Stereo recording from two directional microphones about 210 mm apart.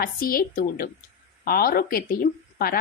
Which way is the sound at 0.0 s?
45° left (ahead or behind).